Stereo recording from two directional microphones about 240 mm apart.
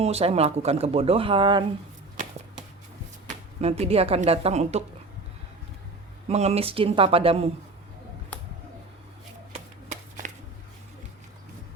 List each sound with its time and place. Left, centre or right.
0.0 s speech: right
3.2 s speech: right
6.2 s speech: right
9.9 s shuffling cards: right